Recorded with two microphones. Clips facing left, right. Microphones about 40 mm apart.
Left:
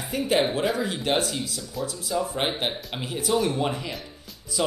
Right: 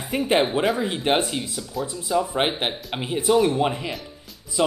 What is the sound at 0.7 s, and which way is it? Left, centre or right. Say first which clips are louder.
Speech: right 3 dB; right.